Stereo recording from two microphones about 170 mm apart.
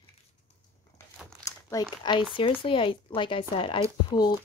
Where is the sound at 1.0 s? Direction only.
15° left (ahead or behind).